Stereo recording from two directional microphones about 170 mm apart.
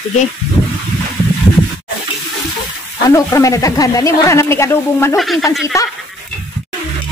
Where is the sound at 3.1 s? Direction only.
20° left (ahead or behind).